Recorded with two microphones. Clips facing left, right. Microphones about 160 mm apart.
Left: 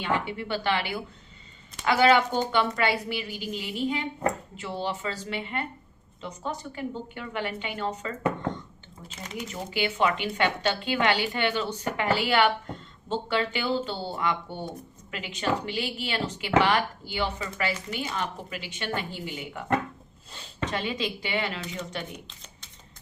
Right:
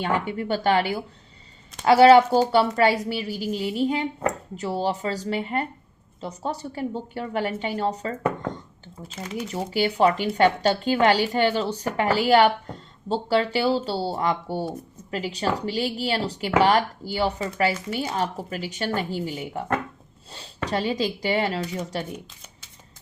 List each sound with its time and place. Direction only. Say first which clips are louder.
0.0 s a woman's voice: right 4 dB; 45° right (ahead or behind)
9.5 s a woman's voice: right 5 dB; 35° right (ahead or behind)